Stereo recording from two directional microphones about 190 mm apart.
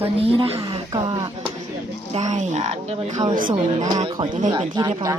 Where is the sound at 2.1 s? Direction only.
35° right (ahead or behind).